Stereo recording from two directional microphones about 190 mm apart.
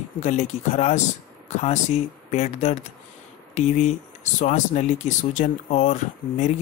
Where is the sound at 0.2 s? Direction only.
35° left (ahead or behind).